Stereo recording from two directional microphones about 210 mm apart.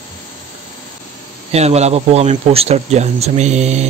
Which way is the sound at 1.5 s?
30° right (ahead or behind).